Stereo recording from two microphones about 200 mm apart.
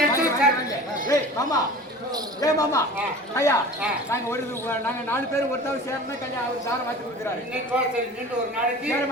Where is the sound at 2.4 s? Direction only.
15° left (ahead or behind).